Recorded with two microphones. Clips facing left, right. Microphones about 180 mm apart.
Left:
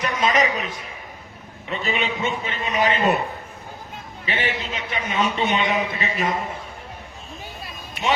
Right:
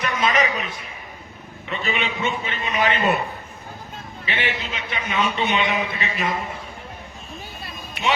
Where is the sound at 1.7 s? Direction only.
35° left (ahead or behind).